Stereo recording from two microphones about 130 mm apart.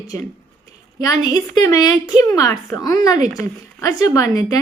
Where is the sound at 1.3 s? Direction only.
25° left (ahead or behind).